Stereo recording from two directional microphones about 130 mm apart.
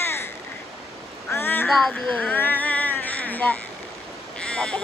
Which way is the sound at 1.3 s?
15° left (ahead or behind).